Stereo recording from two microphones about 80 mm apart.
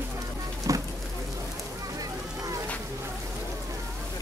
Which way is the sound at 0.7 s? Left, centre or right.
Right.